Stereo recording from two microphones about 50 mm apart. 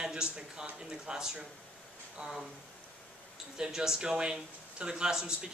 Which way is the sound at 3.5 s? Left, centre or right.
Centre.